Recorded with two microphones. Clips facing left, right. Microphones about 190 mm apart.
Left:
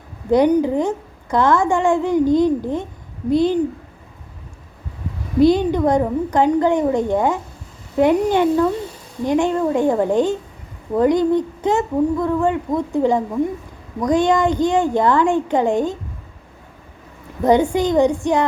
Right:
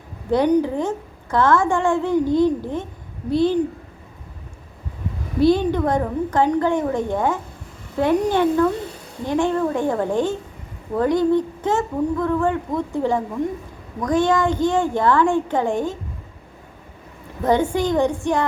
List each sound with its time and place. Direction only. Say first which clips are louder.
0.3 s speech: left 3 dB; 15° left (ahead or behind)
5.4 s speech: left 3 dB; 15° left (ahead or behind)
17.4 s speech: left 3 dB; 15° left (ahead or behind)